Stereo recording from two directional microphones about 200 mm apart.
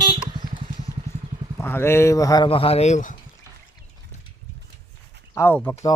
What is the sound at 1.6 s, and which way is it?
Speech, 10° left (ahead or behind).